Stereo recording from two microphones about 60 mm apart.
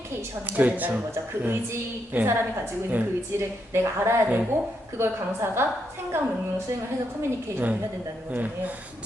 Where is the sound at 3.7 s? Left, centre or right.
Right.